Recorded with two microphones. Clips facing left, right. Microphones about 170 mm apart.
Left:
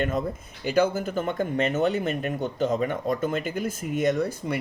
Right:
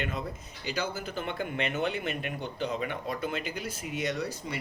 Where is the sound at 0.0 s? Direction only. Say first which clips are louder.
Left 8 dB; 45° left (ahead or behind).